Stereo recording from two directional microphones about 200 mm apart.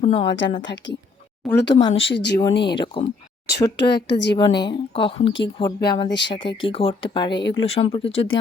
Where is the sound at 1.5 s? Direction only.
60° left (ahead or behind).